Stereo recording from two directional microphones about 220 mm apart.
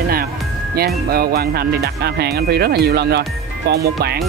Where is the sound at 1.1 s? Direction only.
45° right (ahead or behind).